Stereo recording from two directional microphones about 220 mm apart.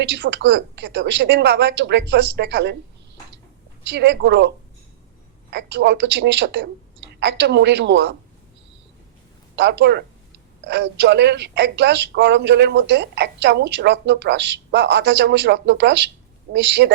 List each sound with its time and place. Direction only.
0.0 s speech: 55° right (ahead or behind)
3.8 s speech: 50° right (ahead or behind)
9.6 s speech: 50° right (ahead or behind)